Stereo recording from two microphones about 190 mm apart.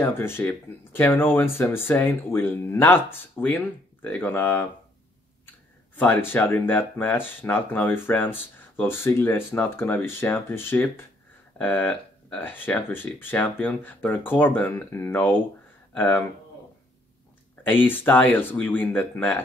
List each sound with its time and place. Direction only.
0.0 s speech: 10° left (ahead or behind)
5.9 s speech: 10° left (ahead or behind)
17.6 s speech: 10° left (ahead or behind)